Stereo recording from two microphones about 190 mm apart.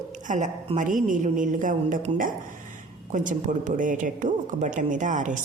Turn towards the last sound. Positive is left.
turn(degrees=-40)  # may be behind; listen again after turning